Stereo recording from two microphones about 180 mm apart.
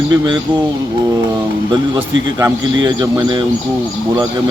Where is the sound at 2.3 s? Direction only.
20° right (ahead or behind).